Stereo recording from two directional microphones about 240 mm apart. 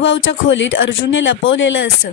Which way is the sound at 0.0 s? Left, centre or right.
Left.